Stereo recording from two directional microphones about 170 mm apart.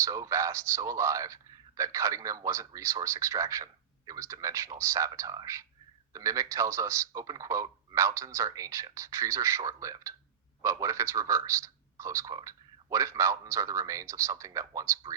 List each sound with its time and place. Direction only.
0.0 s a man's voice: 20° right (ahead or behind)